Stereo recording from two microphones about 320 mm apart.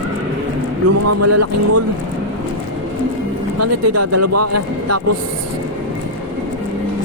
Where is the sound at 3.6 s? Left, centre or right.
Right.